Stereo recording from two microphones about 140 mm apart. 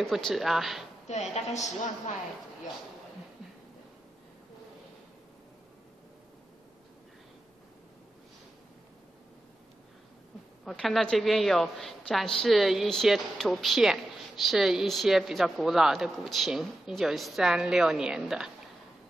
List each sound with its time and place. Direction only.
0.0 s a woman's voice: centre (ahead or behind)
1.0 s a woman's voice: 50° left (ahead or behind)
10.6 s a woman's voice: centre (ahead or behind)